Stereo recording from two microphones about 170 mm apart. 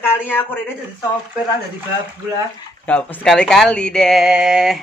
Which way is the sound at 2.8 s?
10° left (ahead or behind).